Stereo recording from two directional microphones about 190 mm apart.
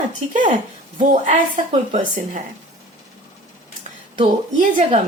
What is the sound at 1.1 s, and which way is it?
A woman's voice, 35° right (ahead or behind).